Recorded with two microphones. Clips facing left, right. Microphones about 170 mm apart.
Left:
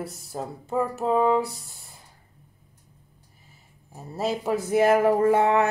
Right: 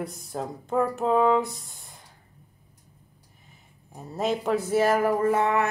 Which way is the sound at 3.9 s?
5° left (ahead or behind).